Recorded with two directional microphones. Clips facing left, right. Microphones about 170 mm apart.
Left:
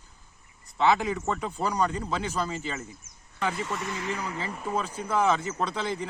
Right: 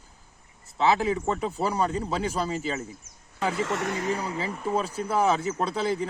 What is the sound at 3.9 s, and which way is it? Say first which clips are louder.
Speech: right 4 dB; 40° right (ahead or behind).